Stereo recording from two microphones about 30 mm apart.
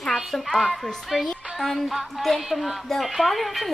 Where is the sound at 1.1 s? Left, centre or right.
Centre.